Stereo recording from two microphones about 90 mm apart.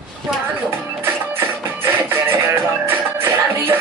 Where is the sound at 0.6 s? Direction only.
25° right (ahead or behind).